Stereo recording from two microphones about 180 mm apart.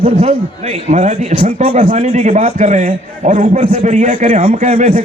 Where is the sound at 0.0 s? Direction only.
35° right (ahead or behind).